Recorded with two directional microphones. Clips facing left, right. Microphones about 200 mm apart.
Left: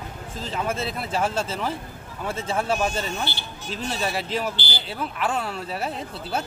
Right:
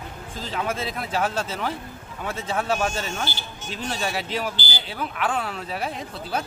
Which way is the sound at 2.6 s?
5° left (ahead or behind).